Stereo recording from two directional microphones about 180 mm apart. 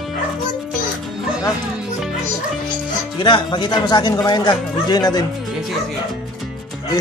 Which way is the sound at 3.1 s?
25° left (ahead or behind).